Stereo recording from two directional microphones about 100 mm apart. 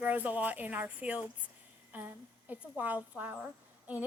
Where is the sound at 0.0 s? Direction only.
15° right (ahead or behind).